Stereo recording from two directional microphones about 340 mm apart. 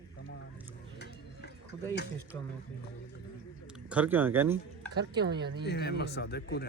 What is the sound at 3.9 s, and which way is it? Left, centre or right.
Speech, centre.